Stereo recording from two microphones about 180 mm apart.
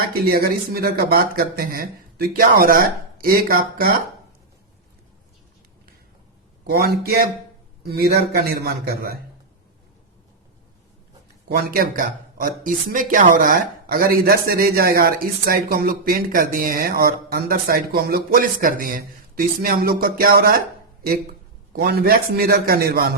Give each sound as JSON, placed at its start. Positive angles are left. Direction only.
{"t": 0.0, "sound": "speech", "side_deg": -55}
{"t": 6.7, "sound": "speech", "side_deg": -60}
{"t": 11.4, "sound": "speech", "side_deg": -60}
{"t": 21.7, "sound": "speech", "side_deg": -60}